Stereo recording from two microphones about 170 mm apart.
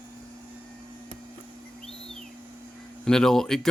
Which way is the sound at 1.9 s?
5° left (ahead or behind).